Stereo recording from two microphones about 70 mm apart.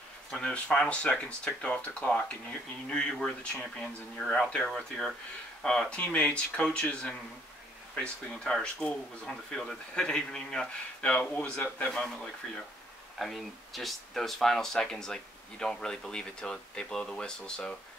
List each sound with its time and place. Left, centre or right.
0.3 s speech: centre